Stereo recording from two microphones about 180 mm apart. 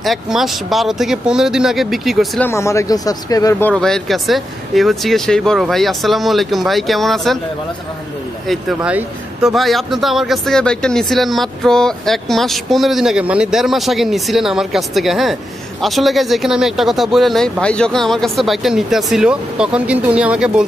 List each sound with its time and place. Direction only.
0.0 s speech: centre (ahead or behind)
2.4 s speech: 15° left (ahead or behind)
8.5 s speech: 5° right (ahead or behind)